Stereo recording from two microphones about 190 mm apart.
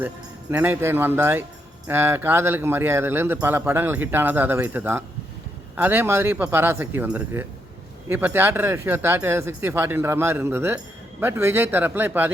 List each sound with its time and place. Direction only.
0.5 s speech: 10° right (ahead or behind)